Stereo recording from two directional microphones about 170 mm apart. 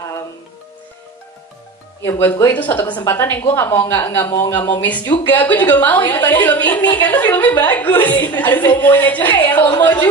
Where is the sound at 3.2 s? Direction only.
15° left (ahead or behind).